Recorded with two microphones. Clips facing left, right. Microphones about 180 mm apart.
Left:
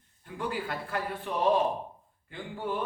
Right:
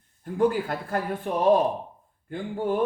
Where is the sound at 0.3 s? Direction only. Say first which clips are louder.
Right 10 dB; 45° right (ahead or behind).